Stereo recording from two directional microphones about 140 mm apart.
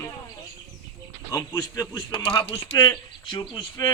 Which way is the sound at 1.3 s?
25° left (ahead or behind).